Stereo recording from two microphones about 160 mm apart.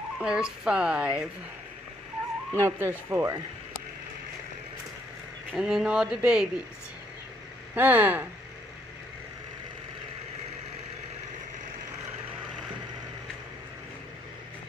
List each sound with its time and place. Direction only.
0.2 s speech: 5° right (ahead or behind)
2.5 s speech: 15° right (ahead or behind)
5.5 s speech: centre (ahead or behind)
7.7 s speech: 10° right (ahead or behind)